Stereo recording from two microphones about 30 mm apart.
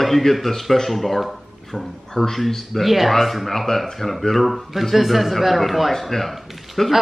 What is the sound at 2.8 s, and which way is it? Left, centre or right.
Speech, centre.